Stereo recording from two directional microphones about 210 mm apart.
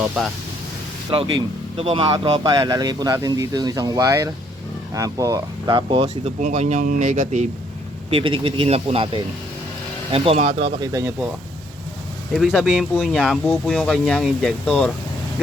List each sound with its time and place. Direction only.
0.2 s speech: centre (ahead or behind)
1.1 s speech: 25° right (ahead or behind)
8.1 s speech: 25° right (ahead or behind)
12.3 s speech: centre (ahead or behind)